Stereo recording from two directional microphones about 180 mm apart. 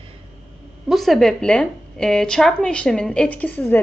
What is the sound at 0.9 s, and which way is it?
A woman's voice, centre (ahead or behind).